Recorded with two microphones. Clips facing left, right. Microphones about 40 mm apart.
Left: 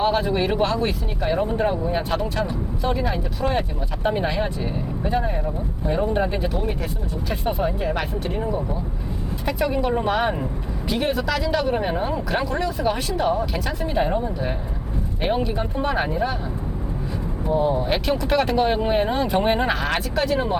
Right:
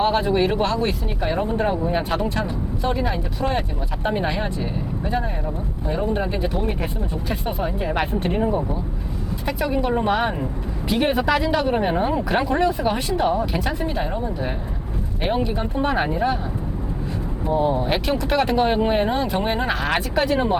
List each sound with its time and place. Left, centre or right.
0.0 s speech: centre
6.5 s speech: centre
8.1 s speech: right
9.5 s speech: centre
11.0 s speech: right
11.5 s speech: centre
12.8 s speech: centre
13.9 s speech: centre
17.5 s speech: centre